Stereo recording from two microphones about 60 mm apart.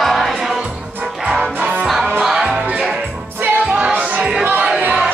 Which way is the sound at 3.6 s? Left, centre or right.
Centre.